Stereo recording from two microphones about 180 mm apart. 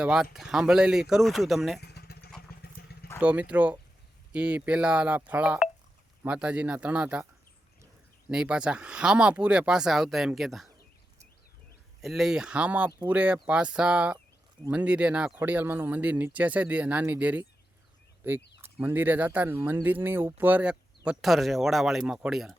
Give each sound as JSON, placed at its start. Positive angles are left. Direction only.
{"t": 0.0, "sound": "speech", "side_deg": -5}
{"t": 1.8, "sound": "vehicle", "side_deg": 60}
{"t": 3.2, "sound": "speech", "side_deg": -10}
{"t": 8.3, "sound": "speech", "side_deg": -5}
{"t": 12.0, "sound": "speech", "side_deg": 0}